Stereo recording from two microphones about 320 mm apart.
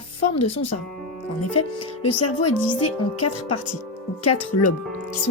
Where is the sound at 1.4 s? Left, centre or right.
Left.